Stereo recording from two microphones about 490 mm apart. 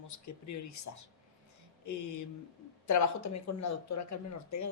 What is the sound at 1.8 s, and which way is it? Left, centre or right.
Speech, left.